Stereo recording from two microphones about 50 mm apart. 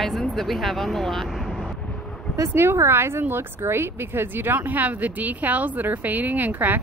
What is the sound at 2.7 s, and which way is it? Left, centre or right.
Speech, right.